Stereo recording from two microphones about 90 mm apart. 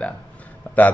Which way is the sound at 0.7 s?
25° left (ahead or behind).